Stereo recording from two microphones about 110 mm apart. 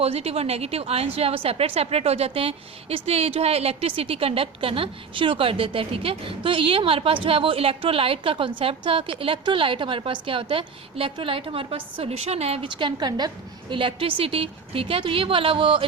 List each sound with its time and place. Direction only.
0.0 s a woman's voice: 65° right (ahead or behind); by 15.9 s 50° right (ahead or behind)